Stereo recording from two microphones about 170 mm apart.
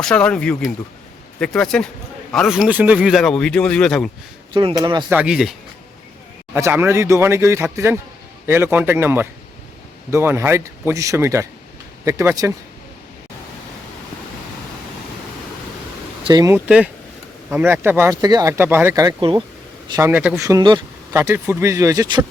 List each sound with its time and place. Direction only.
0.0 s speech: 5° left (ahead or behind)
4.5 s speech: 25° right (ahead or behind)
5.0 s speech: 5° right (ahead or behind)
16.2 s speech: 20° right (ahead or behind)
16.6 s speech: 5° right (ahead or behind); by 19.4 s 25° right (ahead or behind)
19.9 s speech: 15° right (ahead or behind)
21.1 s speech: 15° right (ahead or behind)